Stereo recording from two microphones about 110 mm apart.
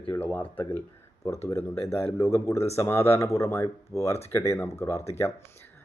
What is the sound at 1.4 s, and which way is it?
Speech, 25° left (ahead or behind).